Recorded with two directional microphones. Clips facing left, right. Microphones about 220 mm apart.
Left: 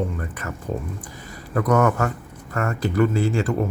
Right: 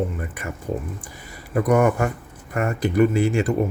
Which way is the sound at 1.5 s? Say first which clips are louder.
Right 1 dB; 10° right (ahead or behind).